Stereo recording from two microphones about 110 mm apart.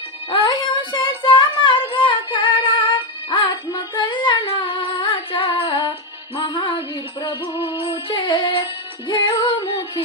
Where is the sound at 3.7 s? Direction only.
45° left (ahead or behind).